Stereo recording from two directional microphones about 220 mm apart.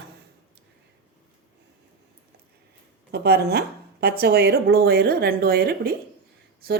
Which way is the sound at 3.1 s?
45° right (ahead or behind).